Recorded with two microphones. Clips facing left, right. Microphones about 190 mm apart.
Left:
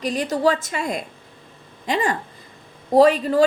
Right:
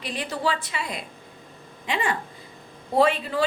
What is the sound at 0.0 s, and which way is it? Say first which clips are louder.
A woman's voice: left 8 dB; 45° left (ahead or behind).